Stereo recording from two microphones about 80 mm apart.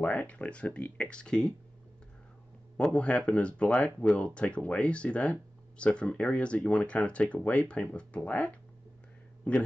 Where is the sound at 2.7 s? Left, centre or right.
Centre.